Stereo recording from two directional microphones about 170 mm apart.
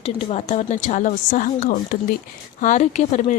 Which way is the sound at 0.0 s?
35° left (ahead or behind).